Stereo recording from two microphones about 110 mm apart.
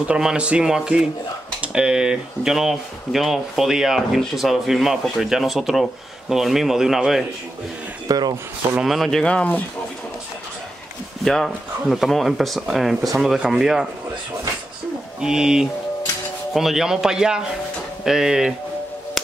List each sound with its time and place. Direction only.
0.1 s speech: 10° right (ahead or behind)
8.1 s speech: 40° right (ahead or behind)
8.7 s speech: centre (ahead or behind)
11.2 s speech: centre (ahead or behind)
15.1 s speech: 5° right (ahead or behind)